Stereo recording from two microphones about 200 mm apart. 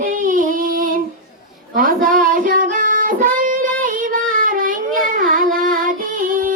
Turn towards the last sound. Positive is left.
turn(degrees=-45)  # may be behind; listen again after turning